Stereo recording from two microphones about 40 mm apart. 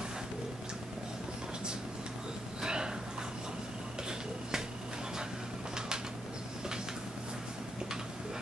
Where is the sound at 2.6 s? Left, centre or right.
Right.